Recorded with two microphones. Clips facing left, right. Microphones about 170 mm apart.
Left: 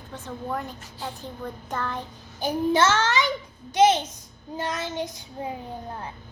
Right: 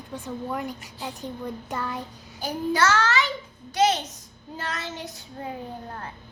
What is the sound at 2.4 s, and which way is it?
Child singing, 20° left (ahead or behind).